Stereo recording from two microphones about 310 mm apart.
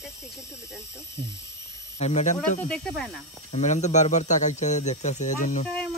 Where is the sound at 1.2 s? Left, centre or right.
Right.